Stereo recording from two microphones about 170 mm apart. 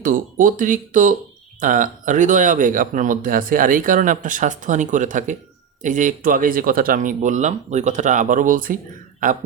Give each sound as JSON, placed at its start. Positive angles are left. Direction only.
{"t": 0.0, "sound": "speech", "side_deg": -55}